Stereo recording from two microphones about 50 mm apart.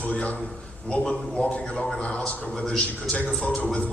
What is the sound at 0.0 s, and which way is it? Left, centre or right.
A man's voice, left.